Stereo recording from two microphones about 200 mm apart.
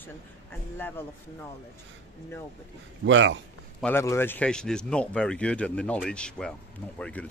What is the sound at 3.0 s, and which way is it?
Speech, 70° right (ahead or behind).